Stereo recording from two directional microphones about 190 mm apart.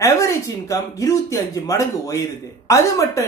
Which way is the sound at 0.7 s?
15° left (ahead or behind).